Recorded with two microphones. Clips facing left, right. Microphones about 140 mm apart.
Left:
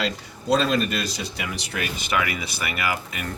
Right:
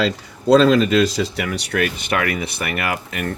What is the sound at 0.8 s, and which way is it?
Speech, 90° right.